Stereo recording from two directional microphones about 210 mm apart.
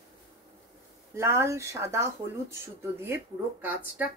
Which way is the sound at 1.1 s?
15° right (ahead or behind).